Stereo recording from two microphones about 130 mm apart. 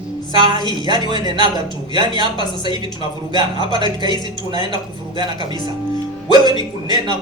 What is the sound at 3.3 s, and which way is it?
Speech, 35° right (ahead or behind).